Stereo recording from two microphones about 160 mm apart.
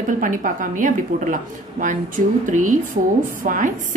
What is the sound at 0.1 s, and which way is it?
A woman's voice, 55° right (ahead or behind).